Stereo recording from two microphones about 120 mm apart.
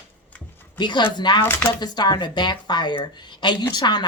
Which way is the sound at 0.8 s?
40° left (ahead or behind).